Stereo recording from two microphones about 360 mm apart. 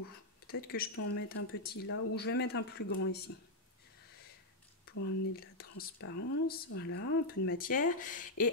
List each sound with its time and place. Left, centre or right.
0.5 s speech: left
4.8 s speech: left